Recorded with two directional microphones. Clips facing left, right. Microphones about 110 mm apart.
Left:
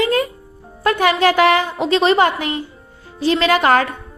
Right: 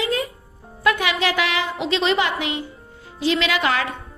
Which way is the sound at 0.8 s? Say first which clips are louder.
Left 5 dB; 45° left (ahead or behind).